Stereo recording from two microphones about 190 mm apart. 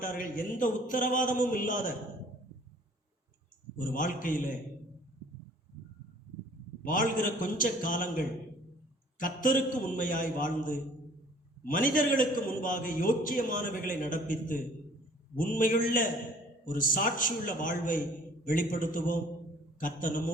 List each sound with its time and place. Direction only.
0.0 s a man's voice: 45° left (ahead or behind)
3.8 s a man's voice: 45° left (ahead or behind)
6.8 s a man's voice: 45° left (ahead or behind)